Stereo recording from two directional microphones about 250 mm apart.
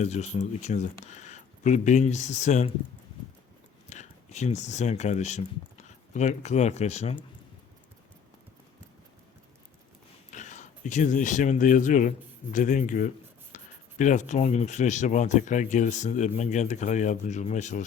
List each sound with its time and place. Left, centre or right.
0.0 s speech: left
3.8 s speech: left
10.3 s speech: left
13.5 s writing: left
14.0 s speech: left